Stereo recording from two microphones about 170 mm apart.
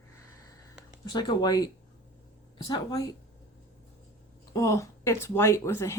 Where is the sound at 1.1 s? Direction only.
25° left (ahead or behind).